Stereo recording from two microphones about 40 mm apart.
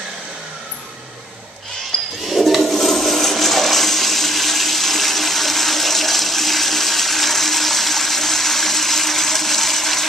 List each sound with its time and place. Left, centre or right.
2.2 s toilet flush: centre